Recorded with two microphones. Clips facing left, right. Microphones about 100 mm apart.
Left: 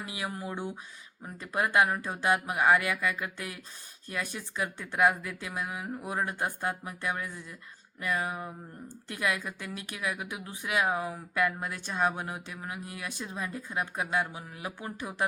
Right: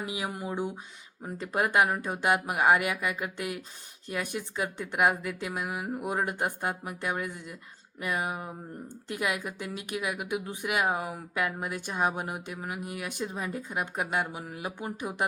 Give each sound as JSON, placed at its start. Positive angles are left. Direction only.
{"t": 0.0, "sound": "speech", "side_deg": -15}